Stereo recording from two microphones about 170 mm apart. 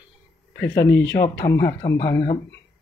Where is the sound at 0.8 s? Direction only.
90° left.